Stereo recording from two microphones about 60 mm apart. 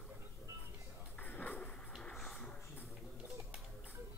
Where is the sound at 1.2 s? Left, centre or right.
Left.